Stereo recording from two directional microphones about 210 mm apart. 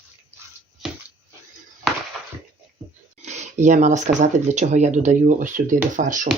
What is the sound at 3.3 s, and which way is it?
Speech, 35° right (ahead or behind).